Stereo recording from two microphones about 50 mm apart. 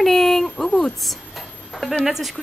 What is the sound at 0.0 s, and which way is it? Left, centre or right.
Speech, centre.